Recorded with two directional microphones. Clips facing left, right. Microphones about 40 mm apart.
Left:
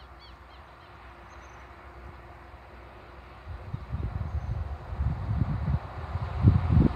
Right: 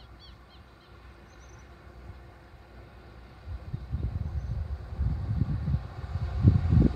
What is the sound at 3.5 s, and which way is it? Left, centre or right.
Train, left.